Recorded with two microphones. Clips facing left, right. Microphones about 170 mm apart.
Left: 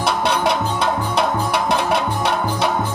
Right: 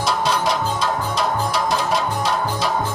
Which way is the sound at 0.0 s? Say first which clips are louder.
Left 2 dB; 60° left (ahead or behind).